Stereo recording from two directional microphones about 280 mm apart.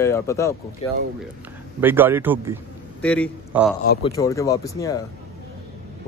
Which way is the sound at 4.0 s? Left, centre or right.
Centre.